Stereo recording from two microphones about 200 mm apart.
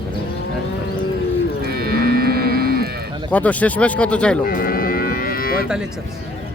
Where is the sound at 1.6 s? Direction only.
50° right (ahead or behind).